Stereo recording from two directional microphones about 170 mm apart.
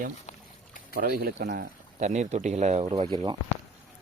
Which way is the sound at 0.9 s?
65° right (ahead or behind).